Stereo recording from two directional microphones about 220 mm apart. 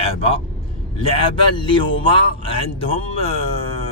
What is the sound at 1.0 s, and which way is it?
Speech, 25° left (ahead or behind).